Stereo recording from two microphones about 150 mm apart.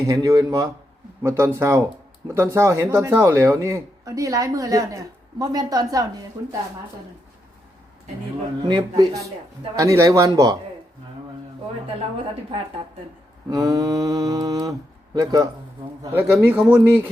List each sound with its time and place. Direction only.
0.0 s speech: 25° right (ahead or behind)
8.6 s speech: 25° right (ahead or behind)
13.5 s speech: 25° right (ahead or behind)
16.1 s speech: 15° right (ahead or behind)